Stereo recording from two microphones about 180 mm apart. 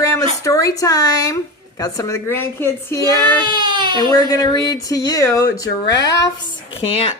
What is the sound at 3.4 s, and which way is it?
Speech, 25° right (ahead or behind).